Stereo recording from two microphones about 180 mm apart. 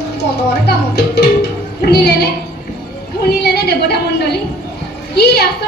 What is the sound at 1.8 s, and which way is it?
Speech, 65° left (ahead or behind).